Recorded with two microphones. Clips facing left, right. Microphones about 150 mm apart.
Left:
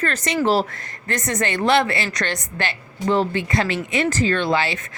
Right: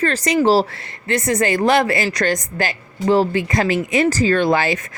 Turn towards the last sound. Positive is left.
turn(degrees=-45)  # may be behind; listen again after turning